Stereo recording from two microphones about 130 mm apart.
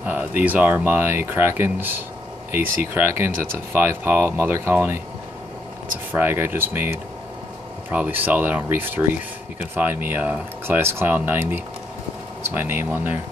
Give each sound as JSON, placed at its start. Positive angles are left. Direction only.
{"t": 0.0, "sound": "speech", "side_deg": -15}
{"t": 6.1, "sound": "speech", "side_deg": -15}